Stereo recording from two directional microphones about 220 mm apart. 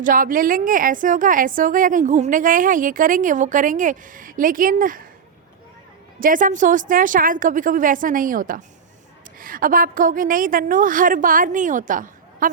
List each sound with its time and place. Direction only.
0.0 s a woman's voice: 40° right (ahead or behind)
6.1 s a woman's voice: 40° right (ahead or behind)